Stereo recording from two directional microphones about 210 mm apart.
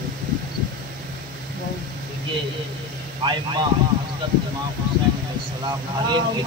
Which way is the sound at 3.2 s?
25° right (ahead or behind).